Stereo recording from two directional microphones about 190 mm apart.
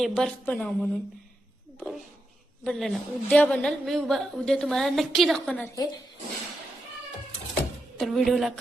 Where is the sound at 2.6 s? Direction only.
Centre (ahead or behind).